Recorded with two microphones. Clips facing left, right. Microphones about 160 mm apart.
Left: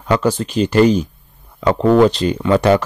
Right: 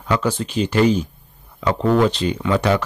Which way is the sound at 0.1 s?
45° left (ahead or behind).